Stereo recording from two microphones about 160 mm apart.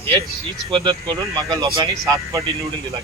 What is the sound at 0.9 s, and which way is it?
A man's voice, 20° right (ahead or behind).